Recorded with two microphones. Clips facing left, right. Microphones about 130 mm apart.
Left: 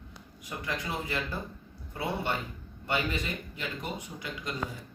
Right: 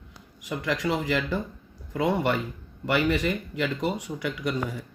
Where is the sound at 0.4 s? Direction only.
90° right; by 4.5 s 75° right (ahead or behind).